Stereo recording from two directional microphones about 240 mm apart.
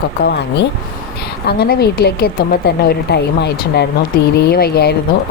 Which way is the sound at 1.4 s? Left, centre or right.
Left.